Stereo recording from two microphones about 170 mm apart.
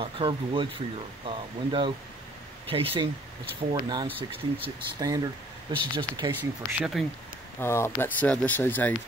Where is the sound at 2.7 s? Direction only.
35° right (ahead or behind).